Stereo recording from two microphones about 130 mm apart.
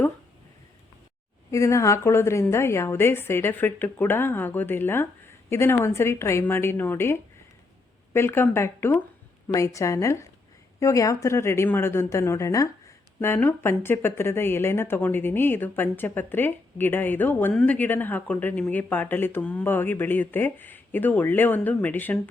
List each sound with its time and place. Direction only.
1.5 s a woman's voice: 25° left (ahead or behind)